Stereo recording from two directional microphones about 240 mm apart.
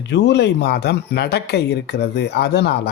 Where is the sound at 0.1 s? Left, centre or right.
Left.